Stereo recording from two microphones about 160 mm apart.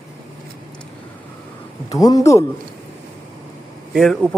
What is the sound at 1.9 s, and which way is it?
Speech, 25° left (ahead or behind).